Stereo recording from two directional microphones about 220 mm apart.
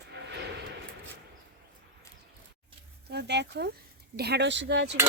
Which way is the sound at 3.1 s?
50° right (ahead or behind).